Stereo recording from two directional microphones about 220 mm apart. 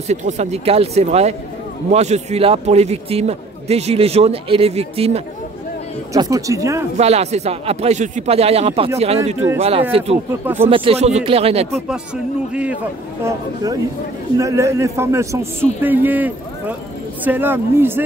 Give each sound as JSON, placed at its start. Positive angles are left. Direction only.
{"t": 0.1, "sound": "a man's voice", "side_deg": -30}
{"t": 6.1, "sound": "a man's voice", "side_deg": -15}
{"t": 7.0, "sound": "a man's voice", "side_deg": -30}
{"t": 10.4, "sound": "a man's voice", "side_deg": -10}
{"t": 10.7, "sound": "a man's voice", "side_deg": -25}
{"t": 14.4, "sound": "a man's voice", "side_deg": -15}